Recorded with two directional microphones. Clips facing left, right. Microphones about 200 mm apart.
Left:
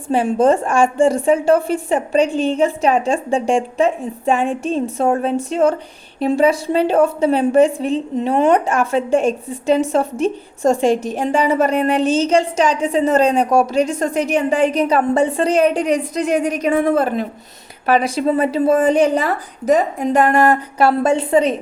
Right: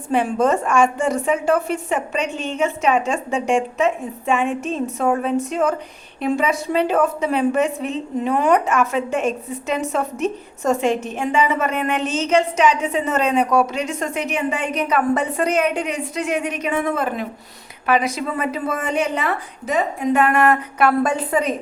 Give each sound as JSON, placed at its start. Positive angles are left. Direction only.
{"t": 0.1, "sound": "a woman's voice", "side_deg": 30}